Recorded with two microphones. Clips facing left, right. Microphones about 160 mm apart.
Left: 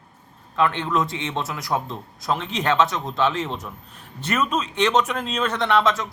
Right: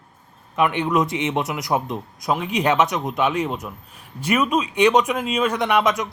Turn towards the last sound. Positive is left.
turn(degrees=-15)  # may be behind; listen again after turning